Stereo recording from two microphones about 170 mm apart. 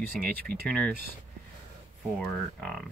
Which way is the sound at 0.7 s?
5° left (ahead or behind).